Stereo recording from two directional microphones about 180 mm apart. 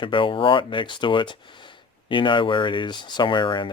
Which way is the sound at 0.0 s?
30° left (ahead or behind).